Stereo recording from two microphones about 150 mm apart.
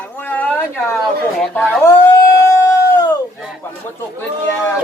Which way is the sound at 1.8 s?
20° left (ahead or behind).